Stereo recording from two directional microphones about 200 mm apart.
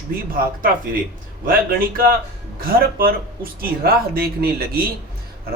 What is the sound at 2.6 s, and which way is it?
Speech, 45° right (ahead or behind).